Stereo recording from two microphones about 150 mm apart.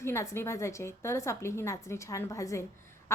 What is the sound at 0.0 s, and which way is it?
A woman's voice, 20° left (ahead or behind).